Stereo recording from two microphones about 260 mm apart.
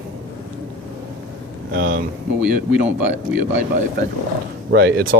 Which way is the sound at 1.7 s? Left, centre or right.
Right.